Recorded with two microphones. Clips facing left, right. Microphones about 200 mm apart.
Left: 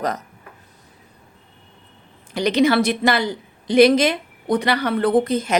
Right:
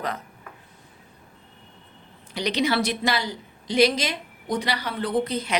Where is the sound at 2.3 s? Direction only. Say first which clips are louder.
Left 7 dB; 50° left (ahead or behind).